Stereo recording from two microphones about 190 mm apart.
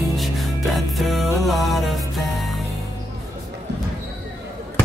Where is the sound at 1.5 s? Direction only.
Centre (ahead or behind).